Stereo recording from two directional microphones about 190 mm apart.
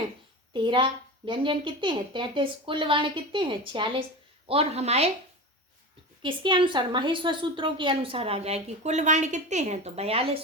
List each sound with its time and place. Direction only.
0.5 s a woman's voice: 25° right (ahead or behind)
6.2 s a woman's voice: 25° right (ahead or behind)